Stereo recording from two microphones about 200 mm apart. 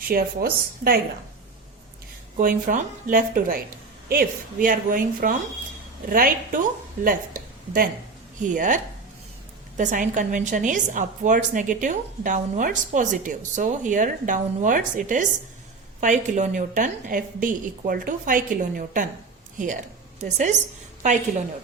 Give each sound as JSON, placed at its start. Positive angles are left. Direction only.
{"t": 0.0, "sound": "speech", "side_deg": -50}
{"t": 2.4, "sound": "a woman's voice", "side_deg": -45}